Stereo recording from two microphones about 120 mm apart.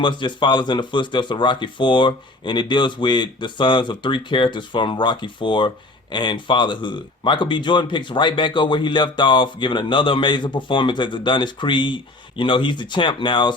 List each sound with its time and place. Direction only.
0.0 s speech: 40° left (ahead or behind)